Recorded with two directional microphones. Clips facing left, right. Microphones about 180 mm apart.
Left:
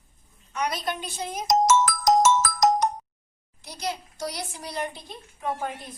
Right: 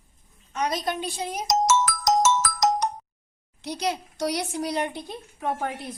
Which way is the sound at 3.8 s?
70° right (ahead or behind).